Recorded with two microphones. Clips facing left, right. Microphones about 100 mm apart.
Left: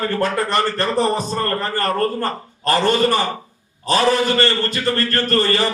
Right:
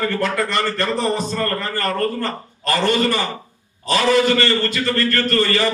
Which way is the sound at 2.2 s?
45° left (ahead or behind).